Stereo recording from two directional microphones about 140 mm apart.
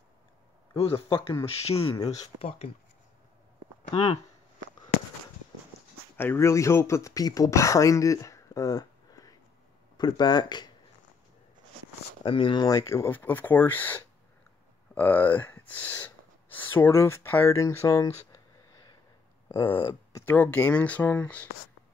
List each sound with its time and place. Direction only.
0.7 s speech: 45° left (ahead or behind)
3.9 s speech: 40° left (ahead or behind)
6.1 s speech: 15° left (ahead or behind)
12.2 s speech: 40° left (ahead or behind); by 18.1 s 25° left (ahead or behind)
19.8 s speech: 25° left (ahead or behind)
20.2 s speech: 10° left (ahead or behind)